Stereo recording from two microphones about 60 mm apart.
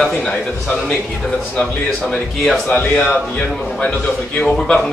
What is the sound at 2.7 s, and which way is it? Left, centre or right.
Speech, left.